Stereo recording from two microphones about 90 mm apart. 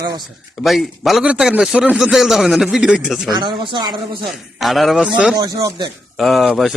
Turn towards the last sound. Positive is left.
turn(degrees=-5)  # may be behind; listen again after turning